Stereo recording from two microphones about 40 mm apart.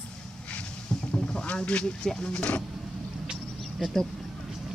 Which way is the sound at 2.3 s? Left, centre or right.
Left.